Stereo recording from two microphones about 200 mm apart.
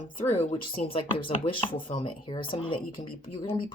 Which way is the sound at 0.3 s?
30° left (ahead or behind).